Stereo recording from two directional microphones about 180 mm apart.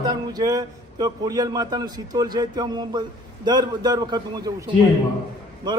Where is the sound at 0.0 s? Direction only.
20° right (ahead or behind).